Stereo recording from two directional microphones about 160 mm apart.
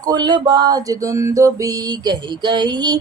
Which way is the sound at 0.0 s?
25° right (ahead or behind).